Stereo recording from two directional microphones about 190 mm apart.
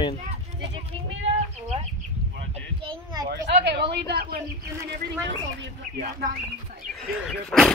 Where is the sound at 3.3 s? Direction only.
60° right (ahead or behind).